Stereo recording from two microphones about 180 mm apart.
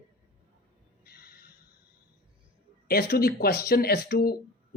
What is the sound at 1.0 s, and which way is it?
Gasp, 60° left (ahead or behind).